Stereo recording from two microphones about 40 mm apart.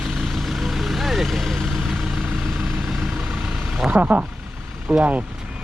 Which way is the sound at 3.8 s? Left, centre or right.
Right.